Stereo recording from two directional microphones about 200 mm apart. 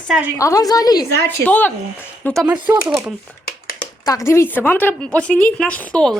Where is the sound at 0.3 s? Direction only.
15° left (ahead or behind).